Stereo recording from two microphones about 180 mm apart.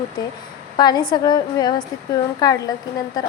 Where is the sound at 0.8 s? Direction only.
25° left (ahead or behind).